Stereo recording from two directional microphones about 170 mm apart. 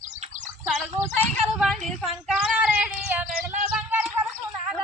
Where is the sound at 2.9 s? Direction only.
5° right (ahead or behind).